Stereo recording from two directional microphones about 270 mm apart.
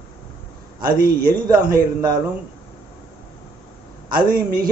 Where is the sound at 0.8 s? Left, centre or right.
Right.